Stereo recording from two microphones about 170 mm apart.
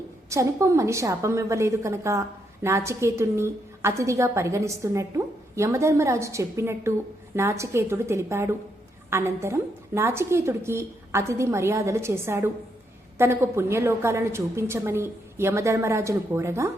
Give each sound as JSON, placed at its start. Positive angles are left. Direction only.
{"t": 0.3, "sound": "a woman's voice", "side_deg": -15}